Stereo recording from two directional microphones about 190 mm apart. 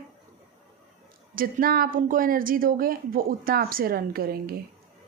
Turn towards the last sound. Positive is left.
turn(degrees=-50)  # may be behind; listen again after turning